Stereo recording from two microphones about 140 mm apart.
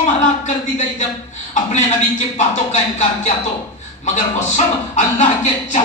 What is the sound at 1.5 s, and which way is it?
Speech, 55° left (ahead or behind).